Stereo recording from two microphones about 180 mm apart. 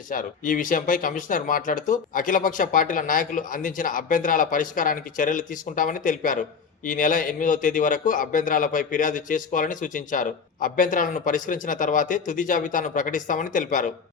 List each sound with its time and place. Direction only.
0.1 s a man's voice: 50° left (ahead or behind)